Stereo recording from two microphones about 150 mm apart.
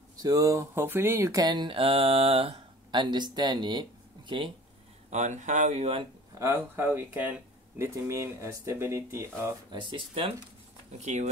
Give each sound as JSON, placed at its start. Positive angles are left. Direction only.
{"t": 0.2, "sound": "speech", "side_deg": -25}
{"t": 5.1, "sound": "speech", "side_deg": -50}
{"t": 6.3, "sound": "speech", "side_deg": -20}
{"t": 9.7, "sound": "speech", "side_deg": -30}
{"t": 10.9, "sound": "speech", "side_deg": -50}